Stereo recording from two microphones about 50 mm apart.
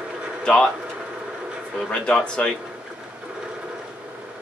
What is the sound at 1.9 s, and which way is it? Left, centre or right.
Speech, centre.